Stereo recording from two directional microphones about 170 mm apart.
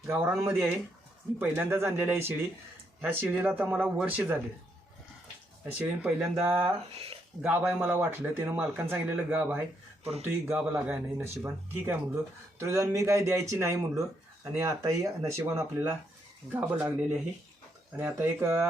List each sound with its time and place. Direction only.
0.1 s speech: 15° right (ahead or behind)
5.7 s speech: 10° right (ahead or behind)
6.9 s speech: 35° right (ahead or behind)
7.4 s speech: 10° right (ahead or behind)
10.0 s speech: 35° right (ahead or behind)
10.2 s speech: 10° right (ahead or behind)